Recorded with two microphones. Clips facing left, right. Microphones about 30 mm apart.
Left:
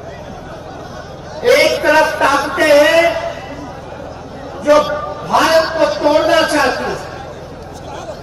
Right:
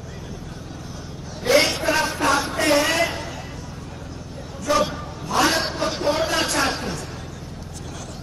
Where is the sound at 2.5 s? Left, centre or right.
Left.